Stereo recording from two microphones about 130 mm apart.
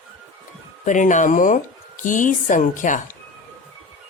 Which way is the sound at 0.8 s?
75° left (ahead or behind).